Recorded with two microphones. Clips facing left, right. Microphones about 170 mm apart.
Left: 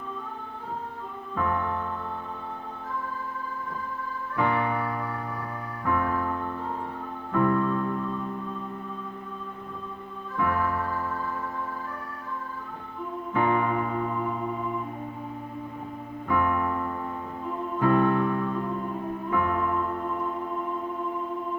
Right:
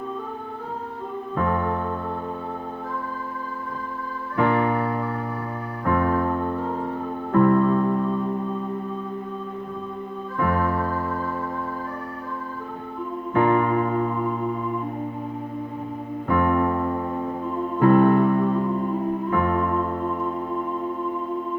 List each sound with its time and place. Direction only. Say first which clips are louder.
1.5 s music: right 4 dB; 60° right (ahead or behind)
4.4 s music: right 6 dB; 55° right (ahead or behind)
10.4 s electric piano: right 4 dB; 55° right (ahead or behind)
13.3 s keyboard: right 5 dB; 55° right (ahead or behind)
16.3 s keyboard: right 5 dB; 55° right (ahead or behind)
17.7 s music: right 6 dB; 55° right (ahead or behind)